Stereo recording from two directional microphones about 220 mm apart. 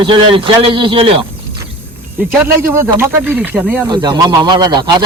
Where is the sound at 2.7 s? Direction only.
10° right (ahead or behind).